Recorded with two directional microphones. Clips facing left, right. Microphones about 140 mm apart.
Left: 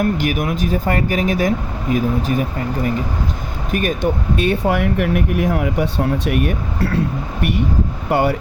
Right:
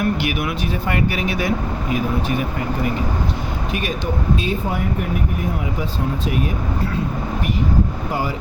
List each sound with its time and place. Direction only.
0.0 s speech: 45° left (ahead or behind)
3.7 s speech: 50° left (ahead or behind); by 7.0 s 65° left (ahead or behind)
8.1 s speech: 65° left (ahead or behind)